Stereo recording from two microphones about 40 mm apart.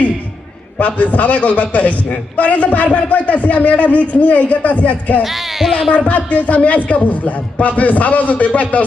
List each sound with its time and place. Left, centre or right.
0.8 s a man's voice: left
5.2 s speech: centre
6.1 s a man's voice: left